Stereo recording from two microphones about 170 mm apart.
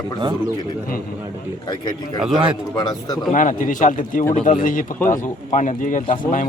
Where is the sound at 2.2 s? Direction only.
5° right (ahead or behind).